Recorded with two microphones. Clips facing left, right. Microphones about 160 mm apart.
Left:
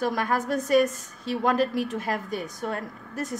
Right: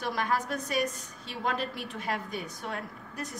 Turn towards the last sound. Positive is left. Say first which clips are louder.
# left 7 dB
turn(degrees=45)  # may be behind; listen again after turning